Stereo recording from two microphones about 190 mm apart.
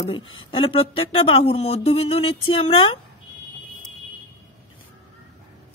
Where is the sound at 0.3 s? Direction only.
25° left (ahead or behind).